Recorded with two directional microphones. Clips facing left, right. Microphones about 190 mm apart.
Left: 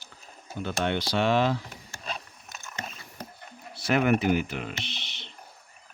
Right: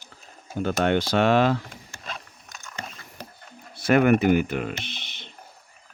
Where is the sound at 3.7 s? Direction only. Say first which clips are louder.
Right 5 dB; 55° right (ahead or behind).